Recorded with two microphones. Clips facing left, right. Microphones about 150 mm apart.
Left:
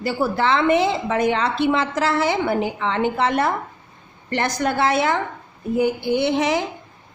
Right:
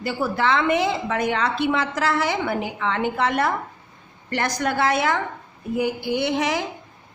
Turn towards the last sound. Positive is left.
turn(degrees=25)  # may be behind; listen again after turning